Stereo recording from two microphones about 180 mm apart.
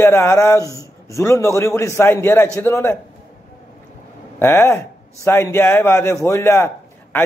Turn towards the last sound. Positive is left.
turn(degrees=15)  # may be behind; listen again after turning